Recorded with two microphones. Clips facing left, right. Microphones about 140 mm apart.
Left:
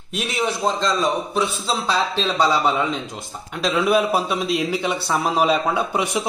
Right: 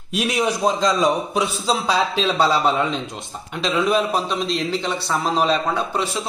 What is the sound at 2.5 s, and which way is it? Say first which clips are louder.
A man's voice: right 1 dB; 5° left (ahead or behind).